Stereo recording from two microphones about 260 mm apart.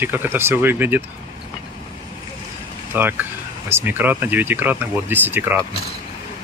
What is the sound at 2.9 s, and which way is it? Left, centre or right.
Speech, centre.